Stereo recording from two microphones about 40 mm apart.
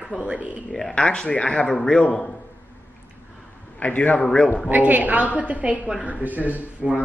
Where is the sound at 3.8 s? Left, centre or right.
Left.